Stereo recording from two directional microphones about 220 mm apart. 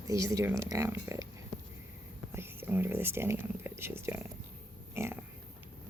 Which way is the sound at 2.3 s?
10° right (ahead or behind).